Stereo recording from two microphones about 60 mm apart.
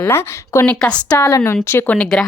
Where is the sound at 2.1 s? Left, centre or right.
Centre.